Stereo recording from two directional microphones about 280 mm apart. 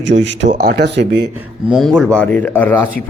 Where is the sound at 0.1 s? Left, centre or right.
Right.